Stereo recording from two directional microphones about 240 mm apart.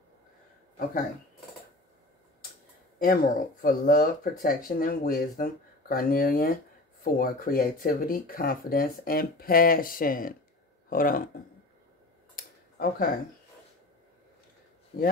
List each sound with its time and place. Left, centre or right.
3.0 s speech: left
12.4 s a sound: left
14.9 s speech: left